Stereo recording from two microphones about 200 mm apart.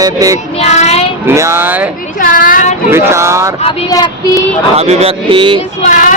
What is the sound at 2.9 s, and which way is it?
Speech, 15° right (ahead or behind).